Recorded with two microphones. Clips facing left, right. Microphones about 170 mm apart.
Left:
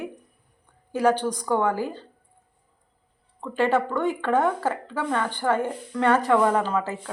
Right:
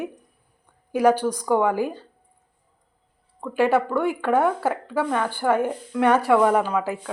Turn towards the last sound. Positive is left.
turn(degrees=-10)  # may be behind; listen again after turning